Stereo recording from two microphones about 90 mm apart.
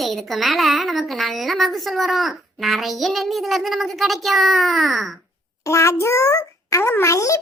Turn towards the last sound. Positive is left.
turn(degrees=35)  # may be behind; listen again after turning